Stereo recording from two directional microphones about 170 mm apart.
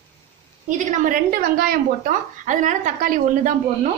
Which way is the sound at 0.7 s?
50° right (ahead or behind).